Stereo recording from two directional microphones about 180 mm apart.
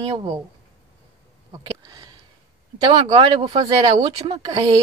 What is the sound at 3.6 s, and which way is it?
Speech, 20° right (ahead or behind).